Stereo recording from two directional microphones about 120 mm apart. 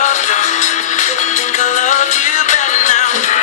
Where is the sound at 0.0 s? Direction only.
90° left.